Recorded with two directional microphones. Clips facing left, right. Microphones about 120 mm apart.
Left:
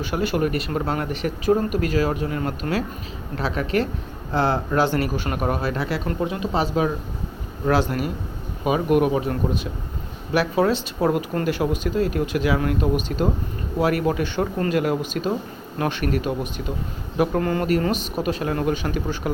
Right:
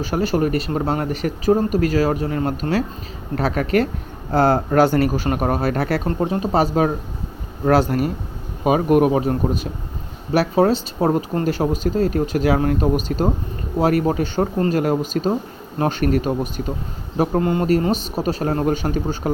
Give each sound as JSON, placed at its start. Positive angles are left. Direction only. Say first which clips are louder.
{"t": 0.0, "sound": "speech", "louder": "right 3 dB", "side_deg": -40}
{"t": 3.3, "sound": "speech", "louder": "right 4 dB", "side_deg": -50}
{"t": 6.1, "sound": "speech", "louder": "right 4 dB", "side_deg": -35}
{"t": 17.2, "sound": "speech", "louder": "right 2 dB", "side_deg": -25}